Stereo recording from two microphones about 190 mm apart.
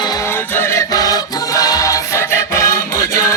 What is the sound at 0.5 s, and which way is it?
Music, 15° left (ahead or behind).